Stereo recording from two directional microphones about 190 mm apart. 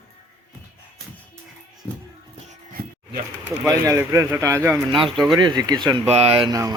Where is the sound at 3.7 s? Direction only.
15° right (ahead or behind).